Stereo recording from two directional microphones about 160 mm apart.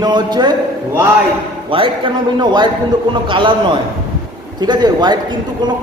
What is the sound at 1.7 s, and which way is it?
A man's voice, 35° right (ahead or behind).